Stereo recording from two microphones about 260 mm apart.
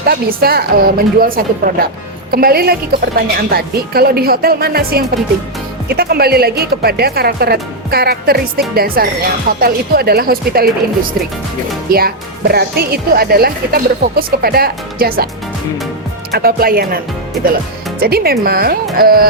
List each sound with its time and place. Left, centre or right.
0.1 s speech: right
11.9 s speech: right
16.3 s speech: right
18.0 s speech: right